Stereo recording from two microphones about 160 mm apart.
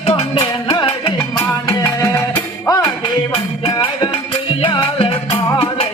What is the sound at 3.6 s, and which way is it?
Music, 35° left (ahead or behind).